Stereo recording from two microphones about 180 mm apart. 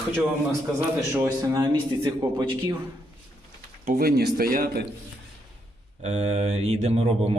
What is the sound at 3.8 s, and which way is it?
Speech, 55° right (ahead or behind).